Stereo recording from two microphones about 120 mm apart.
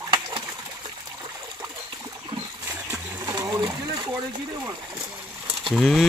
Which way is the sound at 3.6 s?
35° right (ahead or behind).